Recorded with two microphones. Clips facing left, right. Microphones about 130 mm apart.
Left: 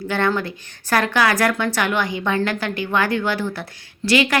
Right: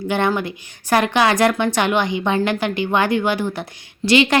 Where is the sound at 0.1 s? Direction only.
15° right (ahead or behind).